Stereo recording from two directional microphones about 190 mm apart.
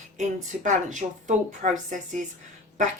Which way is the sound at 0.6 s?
40° right (ahead or behind).